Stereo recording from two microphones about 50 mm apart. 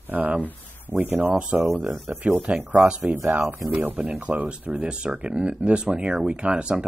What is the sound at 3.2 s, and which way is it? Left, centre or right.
Speech, right.